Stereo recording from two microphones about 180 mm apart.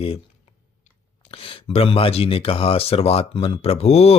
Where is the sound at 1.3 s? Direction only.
30° left (ahead or behind).